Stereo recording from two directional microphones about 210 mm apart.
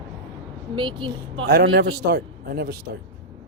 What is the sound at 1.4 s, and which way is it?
A man's voice, 50° right (ahead or behind).